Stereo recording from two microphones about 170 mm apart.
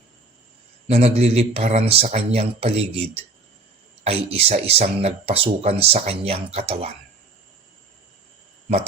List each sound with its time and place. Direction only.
0.9 s speech: 40° right (ahead or behind)